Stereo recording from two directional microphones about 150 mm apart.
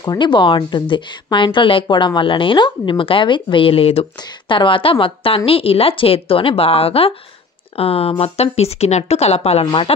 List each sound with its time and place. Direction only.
0.0 s a woman's voice: 30° left (ahead or behind)